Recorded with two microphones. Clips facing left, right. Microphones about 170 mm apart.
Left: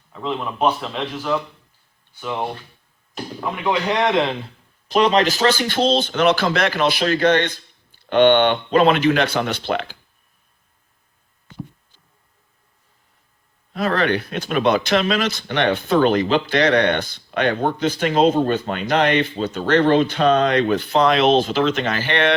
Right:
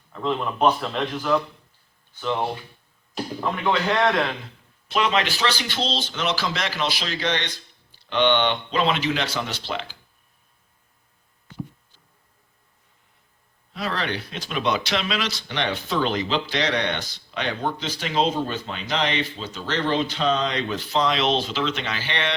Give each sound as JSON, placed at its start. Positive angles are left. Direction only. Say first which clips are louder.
{"t": 0.1, "sound": "a man's voice", "louder": "even", "side_deg": 5}
{"t": 3.6, "sound": "a man's voice", "louder": "left 2 dB", "side_deg": 15}
{"t": 4.9, "sound": "speech", "louder": "left 6 dB", "side_deg": 35}
{"t": 13.7, "sound": "speech", "louder": "left 8 dB", "side_deg": 55}